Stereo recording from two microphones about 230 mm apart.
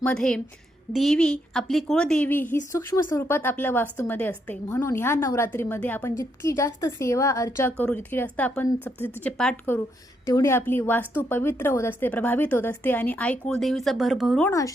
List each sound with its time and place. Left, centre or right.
0.0 s a woman's voice: centre